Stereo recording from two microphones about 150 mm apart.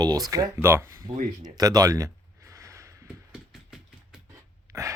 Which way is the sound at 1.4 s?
25° right (ahead or behind).